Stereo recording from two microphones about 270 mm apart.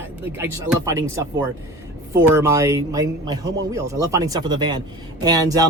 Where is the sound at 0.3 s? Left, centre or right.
Centre.